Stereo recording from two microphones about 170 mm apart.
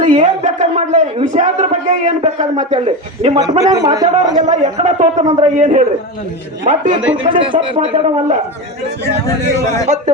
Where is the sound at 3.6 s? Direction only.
25° right (ahead or behind).